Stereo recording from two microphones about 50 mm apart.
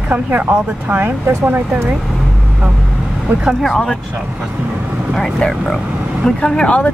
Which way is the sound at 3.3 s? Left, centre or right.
Right.